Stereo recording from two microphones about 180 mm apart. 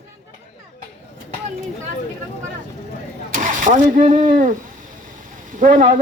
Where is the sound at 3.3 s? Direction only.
45° right (ahead or behind).